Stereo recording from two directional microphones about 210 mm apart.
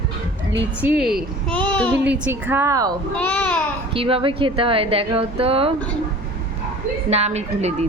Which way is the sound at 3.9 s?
25° right (ahead or behind).